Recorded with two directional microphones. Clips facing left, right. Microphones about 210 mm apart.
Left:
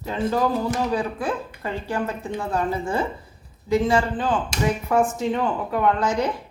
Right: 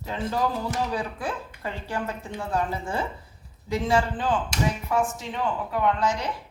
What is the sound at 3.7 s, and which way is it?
A woman's voice, 50° left (ahead or behind).